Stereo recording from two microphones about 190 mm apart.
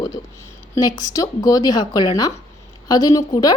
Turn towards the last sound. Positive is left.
turn(degrees=20)  # may be behind; listen again after turning